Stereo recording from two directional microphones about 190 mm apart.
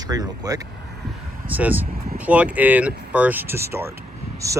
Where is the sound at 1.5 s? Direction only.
10° right (ahead or behind).